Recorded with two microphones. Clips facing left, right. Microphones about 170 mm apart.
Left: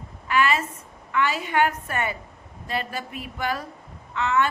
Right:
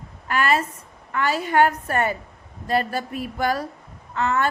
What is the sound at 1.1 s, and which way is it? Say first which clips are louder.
A woman's voice: right 3 dB; 40° right (ahead or behind).